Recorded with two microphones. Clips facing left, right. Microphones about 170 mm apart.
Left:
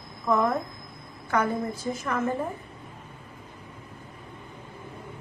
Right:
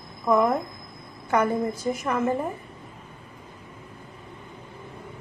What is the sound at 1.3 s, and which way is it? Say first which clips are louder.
Speech: right 3 dB; 20° right (ahead or behind).